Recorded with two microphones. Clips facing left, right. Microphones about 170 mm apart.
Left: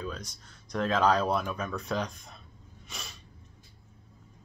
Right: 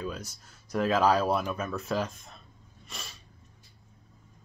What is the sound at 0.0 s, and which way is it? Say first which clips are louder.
Speech: right 2 dB; 10° right (ahead or behind).